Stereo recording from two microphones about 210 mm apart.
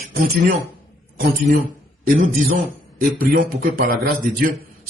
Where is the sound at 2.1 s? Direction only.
40° right (ahead or behind).